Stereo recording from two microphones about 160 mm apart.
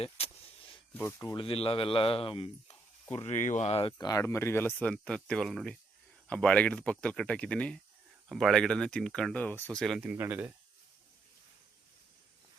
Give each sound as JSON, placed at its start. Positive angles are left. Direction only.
{"t": 0.2, "sound": "vehicle", "side_deg": 40}
{"t": 0.9, "sound": "speech", "side_deg": 15}
{"t": 1.4, "sound": "speech", "side_deg": 35}
{"t": 3.2, "sound": "speech", "side_deg": 50}
{"t": 10.0, "sound": "speech", "side_deg": -10}